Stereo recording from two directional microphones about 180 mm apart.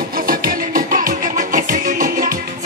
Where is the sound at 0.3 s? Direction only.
50° right (ahead or behind).